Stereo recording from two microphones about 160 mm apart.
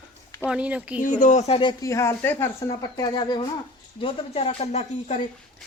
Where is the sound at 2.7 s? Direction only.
25° left (ahead or behind); by 5.2 s 45° left (ahead or behind).